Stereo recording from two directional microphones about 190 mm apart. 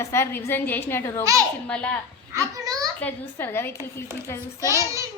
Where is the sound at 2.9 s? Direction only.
10° left (ahead or behind).